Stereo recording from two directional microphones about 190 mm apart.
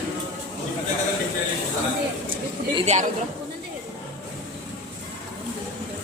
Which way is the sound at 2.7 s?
35° right (ahead or behind).